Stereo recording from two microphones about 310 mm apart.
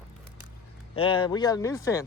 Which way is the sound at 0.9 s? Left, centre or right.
Centre.